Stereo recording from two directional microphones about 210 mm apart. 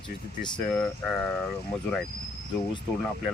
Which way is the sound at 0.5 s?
5° left (ahead or behind).